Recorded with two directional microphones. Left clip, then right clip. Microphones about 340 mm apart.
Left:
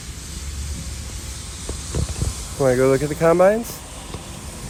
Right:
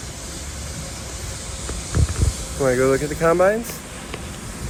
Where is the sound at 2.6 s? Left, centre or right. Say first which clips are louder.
Left 1 dB; left.